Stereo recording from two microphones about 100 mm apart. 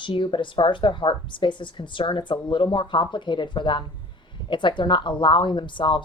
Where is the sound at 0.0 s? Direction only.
55° left (ahead or behind).